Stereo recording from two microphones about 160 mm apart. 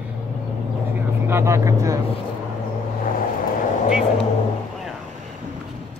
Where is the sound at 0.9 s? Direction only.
15° right (ahead or behind).